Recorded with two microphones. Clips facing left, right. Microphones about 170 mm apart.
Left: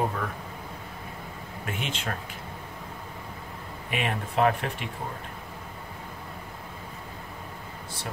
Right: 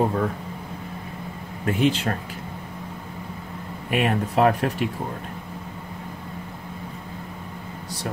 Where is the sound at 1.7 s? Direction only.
35° right (ahead or behind).